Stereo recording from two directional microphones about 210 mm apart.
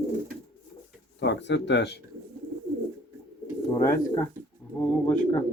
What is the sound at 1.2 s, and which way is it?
Speech, 55° left (ahead or behind).